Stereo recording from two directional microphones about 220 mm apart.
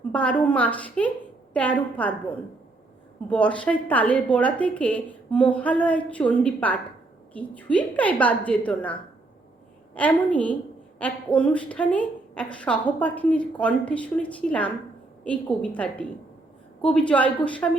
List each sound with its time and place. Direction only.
0.1 s a woman's voice: 5° left (ahead or behind)
3.2 s a woman's voice: 5° left (ahead or behind)